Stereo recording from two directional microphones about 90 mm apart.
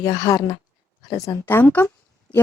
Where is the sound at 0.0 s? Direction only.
40° left (ahead or behind).